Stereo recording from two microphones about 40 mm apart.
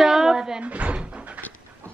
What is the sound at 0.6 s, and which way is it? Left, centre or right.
Speech, right.